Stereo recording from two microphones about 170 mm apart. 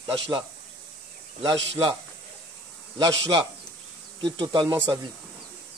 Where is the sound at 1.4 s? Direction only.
25° right (ahead or behind).